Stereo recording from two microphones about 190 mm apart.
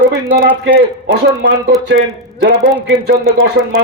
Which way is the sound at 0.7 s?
60° right (ahead or behind).